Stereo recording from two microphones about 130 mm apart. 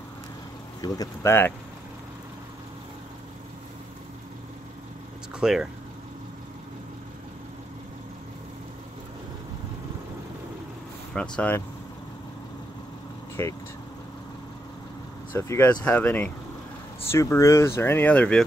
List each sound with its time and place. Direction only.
0.7 s speech: 30° left (ahead or behind)
5.3 s speech: 5° right (ahead or behind)
11.1 s speech: 10° left (ahead or behind)
13.4 s speech: 20° left (ahead or behind)
15.3 s speech: 20° left (ahead or behind)